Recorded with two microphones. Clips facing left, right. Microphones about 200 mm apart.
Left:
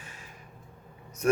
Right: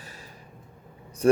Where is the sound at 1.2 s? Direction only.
30° right (ahead or behind).